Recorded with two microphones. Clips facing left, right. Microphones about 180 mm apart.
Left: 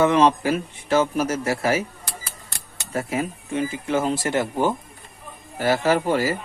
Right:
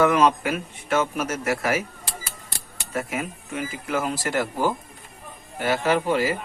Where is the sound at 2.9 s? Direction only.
35° left (ahead or behind).